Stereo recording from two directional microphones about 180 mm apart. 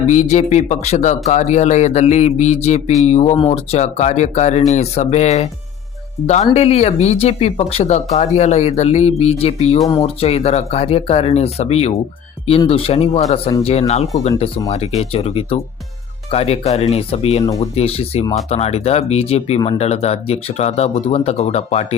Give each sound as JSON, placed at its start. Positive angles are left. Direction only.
{"t": 0.1, "sound": "speech", "side_deg": 40}
{"t": 6.5, "sound": "speech", "side_deg": 35}